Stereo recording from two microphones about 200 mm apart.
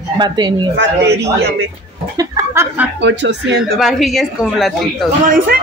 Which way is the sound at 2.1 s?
20° right (ahead or behind).